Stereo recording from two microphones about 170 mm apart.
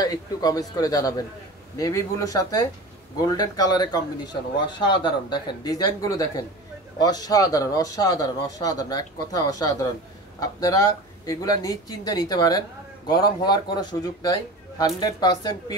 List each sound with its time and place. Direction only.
0.0 s speech: 25° left (ahead or behind)